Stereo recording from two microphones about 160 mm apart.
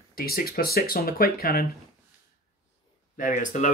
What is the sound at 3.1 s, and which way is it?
Speech, 55° left (ahead or behind).